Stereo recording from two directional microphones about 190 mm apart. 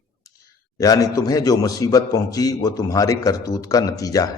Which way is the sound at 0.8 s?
20° left (ahead or behind).